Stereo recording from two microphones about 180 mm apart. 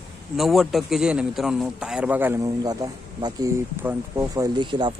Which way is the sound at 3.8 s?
10° right (ahead or behind).